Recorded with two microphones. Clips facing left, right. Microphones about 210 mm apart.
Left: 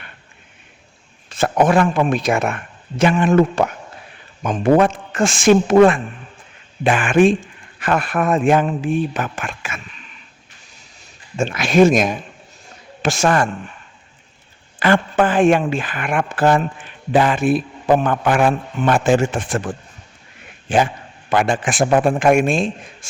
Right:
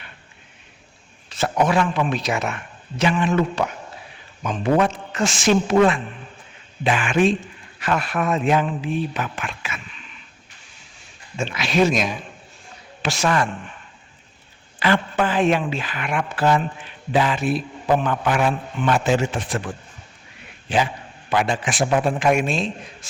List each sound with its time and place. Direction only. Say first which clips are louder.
1.3 s a man's voice: left 5 dB; 50° left (ahead or behind)
11.3 s a man's voice: left 6 dB; 50° left (ahead or behind)
14.8 s a man's voice: left 4 dB; 50° left (ahead or behind)